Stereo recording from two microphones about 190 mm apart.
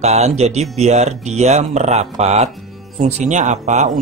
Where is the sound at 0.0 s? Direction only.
35° right (ahead or behind).